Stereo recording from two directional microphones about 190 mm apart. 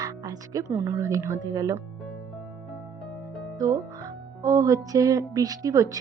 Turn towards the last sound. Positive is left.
turn(degrees=-20)  # may be behind; listen again after turning